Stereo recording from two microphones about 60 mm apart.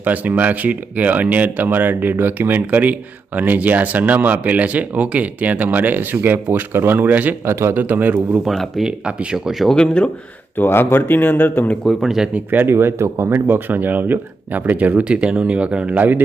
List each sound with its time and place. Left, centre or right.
0.0 s speech: right
7.4 s speech: right
7.8 s speech: right
8.4 s speech: centre
9.0 s speech: centre
9.7 s speech: centre
10.6 s speech: left
11.9 s speech: centre
12.3 s speech: right
12.7 s speech: right